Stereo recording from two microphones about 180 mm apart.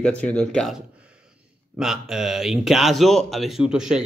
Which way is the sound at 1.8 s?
5° right (ahead or behind).